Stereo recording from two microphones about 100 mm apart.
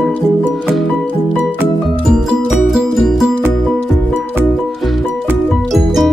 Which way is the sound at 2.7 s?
5° right (ahead or behind).